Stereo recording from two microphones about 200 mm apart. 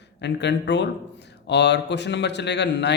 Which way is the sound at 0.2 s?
60° left (ahead or behind).